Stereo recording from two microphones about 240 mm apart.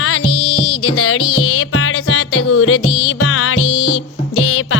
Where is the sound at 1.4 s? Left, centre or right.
Left.